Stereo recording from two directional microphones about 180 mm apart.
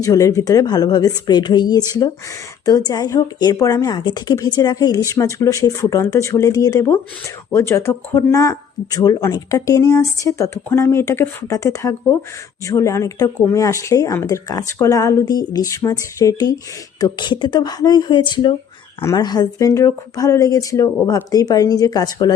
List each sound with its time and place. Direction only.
0.0 s a woman's voice: 20° left (ahead or behind)